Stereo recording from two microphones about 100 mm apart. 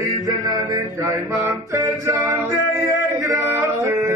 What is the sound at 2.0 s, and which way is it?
Music, 30° right (ahead or behind).